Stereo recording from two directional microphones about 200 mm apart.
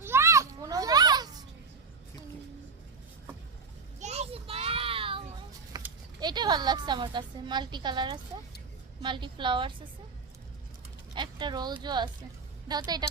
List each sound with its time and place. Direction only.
0.0 s children playing: 10° right (ahead or behind)
4.0 s children playing: 35° right (ahead or behind)
5.7 s a sound: 20° right (ahead or behind)
6.1 s a woman's voice: 20° right (ahead or behind)
11.1 s a woman's voice: 25° right (ahead or behind)